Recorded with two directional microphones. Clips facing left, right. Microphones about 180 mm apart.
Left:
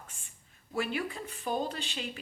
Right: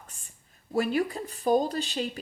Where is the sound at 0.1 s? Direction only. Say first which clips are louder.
Right 1 dB; 40° right (ahead or behind).